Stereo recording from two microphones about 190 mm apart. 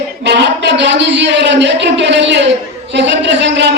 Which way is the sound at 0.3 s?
65° right (ahead or behind).